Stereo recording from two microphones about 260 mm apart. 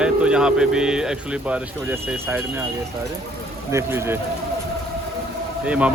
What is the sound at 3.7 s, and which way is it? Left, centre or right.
Speech, centre.